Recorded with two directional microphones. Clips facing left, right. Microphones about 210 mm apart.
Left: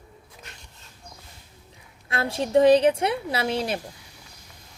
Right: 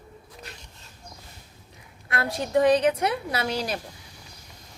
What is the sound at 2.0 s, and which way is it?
A woman's voice, 25° left (ahead or behind).